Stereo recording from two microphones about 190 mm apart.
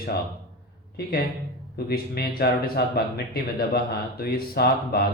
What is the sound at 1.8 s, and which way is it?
Speech, 55° left (ahead or behind).